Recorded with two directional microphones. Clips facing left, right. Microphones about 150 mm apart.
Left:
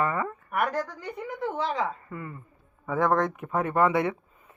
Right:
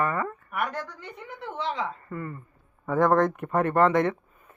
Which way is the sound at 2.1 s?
10° left (ahead or behind).